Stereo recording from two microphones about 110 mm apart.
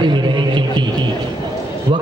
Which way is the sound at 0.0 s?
45° right (ahead or behind).